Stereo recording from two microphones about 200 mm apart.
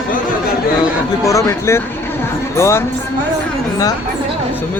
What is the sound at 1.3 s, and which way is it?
Speech, 15° left (ahead or behind).